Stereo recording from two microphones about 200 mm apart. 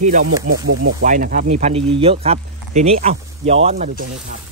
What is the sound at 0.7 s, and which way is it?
Speech, 75° right (ahead or behind).